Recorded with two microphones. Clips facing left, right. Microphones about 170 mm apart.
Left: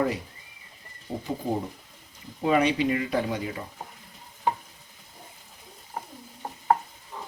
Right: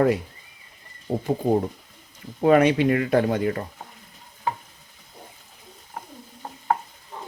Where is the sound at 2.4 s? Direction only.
55° right (ahead or behind).